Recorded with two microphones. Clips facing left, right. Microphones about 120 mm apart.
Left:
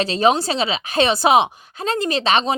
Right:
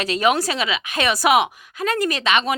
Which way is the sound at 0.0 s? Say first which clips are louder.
Left 2 dB; 30° left (ahead or behind).